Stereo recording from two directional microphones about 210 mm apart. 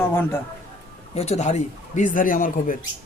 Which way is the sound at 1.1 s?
30° left (ahead or behind).